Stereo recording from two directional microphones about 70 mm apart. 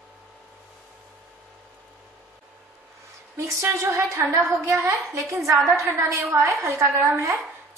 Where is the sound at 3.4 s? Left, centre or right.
Right.